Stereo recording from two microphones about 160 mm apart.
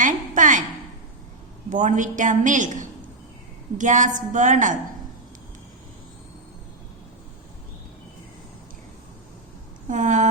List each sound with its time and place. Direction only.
0.0 s a sound: 55° right (ahead or behind)
1.7 s a woman's voice: 50° right (ahead or behind)
9.9 s a woman's voice: 50° right (ahead or behind)